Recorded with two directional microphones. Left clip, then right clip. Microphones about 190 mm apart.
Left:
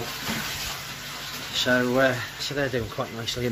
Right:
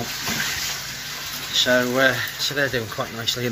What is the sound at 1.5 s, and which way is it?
Speech, 10° left (ahead or behind).